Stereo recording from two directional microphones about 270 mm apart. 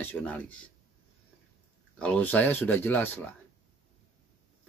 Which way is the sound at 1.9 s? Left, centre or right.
Centre.